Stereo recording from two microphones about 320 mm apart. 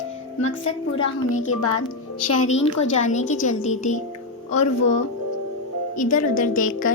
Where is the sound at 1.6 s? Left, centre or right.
Left.